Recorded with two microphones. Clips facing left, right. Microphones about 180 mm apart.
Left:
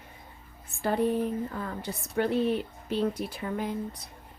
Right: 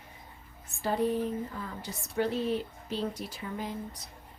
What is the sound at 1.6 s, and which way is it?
Speech, 60° left (ahead or behind).